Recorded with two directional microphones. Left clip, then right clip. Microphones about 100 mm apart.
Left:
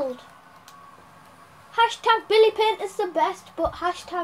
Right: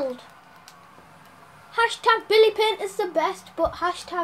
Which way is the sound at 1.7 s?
45° right (ahead or behind).